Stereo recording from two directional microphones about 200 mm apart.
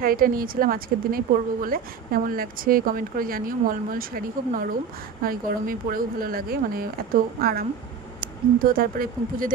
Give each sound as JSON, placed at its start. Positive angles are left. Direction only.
{"t": 0.0, "sound": "speech", "side_deg": -45}